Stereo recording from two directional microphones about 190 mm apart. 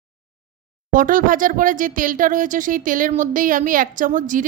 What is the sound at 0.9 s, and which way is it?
Speech, 45° right (ahead or behind).